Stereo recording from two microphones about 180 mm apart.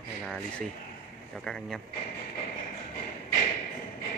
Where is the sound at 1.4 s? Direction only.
5° left (ahead or behind).